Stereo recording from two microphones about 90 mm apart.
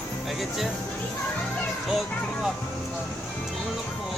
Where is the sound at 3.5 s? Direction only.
Centre (ahead or behind).